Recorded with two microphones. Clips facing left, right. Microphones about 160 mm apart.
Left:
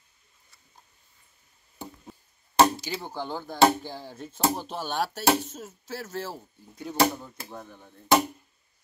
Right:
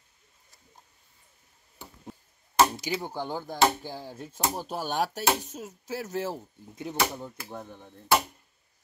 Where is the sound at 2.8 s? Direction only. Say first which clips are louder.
Right 2 dB; 15° right (ahead or behind).